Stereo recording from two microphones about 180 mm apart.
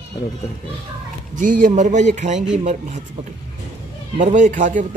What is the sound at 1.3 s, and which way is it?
Speech, 45° right (ahead or behind).